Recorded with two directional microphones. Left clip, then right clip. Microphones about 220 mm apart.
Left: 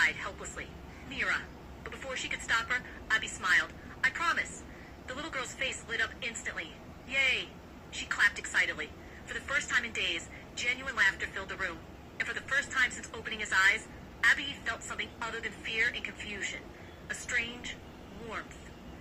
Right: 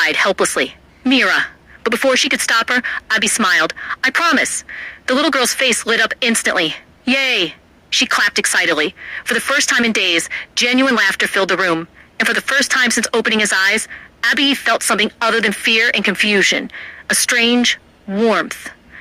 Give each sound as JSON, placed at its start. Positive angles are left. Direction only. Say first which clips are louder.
{"t": 0.0, "sound": "speech", "louder": "right 17 dB", "side_deg": -45}